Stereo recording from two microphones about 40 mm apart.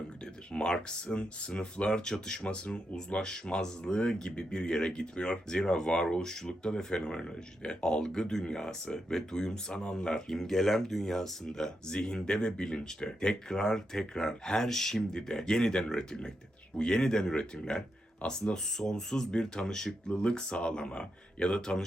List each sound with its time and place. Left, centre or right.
0.5 s speech: centre